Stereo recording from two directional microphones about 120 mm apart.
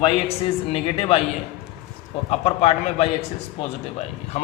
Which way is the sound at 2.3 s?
60° left (ahead or behind).